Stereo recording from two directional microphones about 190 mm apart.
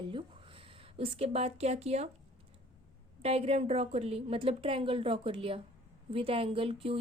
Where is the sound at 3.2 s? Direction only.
30° right (ahead or behind).